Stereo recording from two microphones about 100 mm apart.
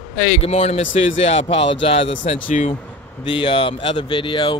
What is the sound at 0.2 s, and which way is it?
Speech, 85° left.